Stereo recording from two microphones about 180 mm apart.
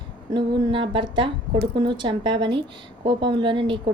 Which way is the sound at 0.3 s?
25° right (ahead or behind).